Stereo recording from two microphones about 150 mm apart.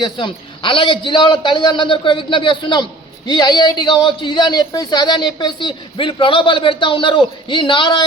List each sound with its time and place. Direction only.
0.0 s a man's voice: 30° left (ahead or behind)